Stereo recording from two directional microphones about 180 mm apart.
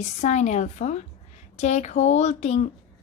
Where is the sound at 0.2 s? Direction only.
40° left (ahead or behind).